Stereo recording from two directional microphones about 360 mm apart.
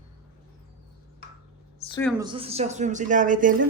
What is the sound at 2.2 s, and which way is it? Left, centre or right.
Speech, centre.